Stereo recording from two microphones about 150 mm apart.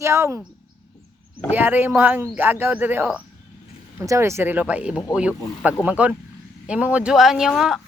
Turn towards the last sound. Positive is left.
turn(degrees=-5)  # may be behind; listen again after turning